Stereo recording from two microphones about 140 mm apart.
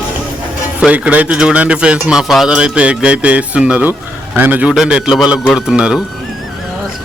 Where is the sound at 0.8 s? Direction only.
10° right (ahead or behind).